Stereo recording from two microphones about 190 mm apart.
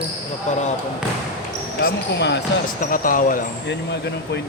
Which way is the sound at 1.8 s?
65° left (ahead or behind).